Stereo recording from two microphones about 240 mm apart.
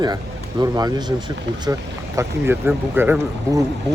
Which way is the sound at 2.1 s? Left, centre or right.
Centre.